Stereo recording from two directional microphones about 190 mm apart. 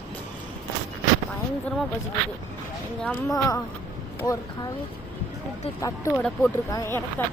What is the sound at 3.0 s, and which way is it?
Speech, 10° left (ahead or behind).